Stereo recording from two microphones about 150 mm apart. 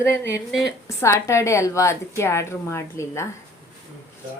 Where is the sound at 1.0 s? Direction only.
20° left (ahead or behind).